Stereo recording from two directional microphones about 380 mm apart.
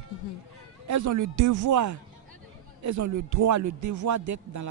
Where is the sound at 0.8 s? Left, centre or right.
Right.